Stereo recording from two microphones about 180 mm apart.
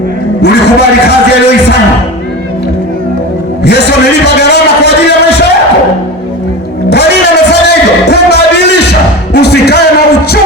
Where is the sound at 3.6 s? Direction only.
65° left (ahead or behind).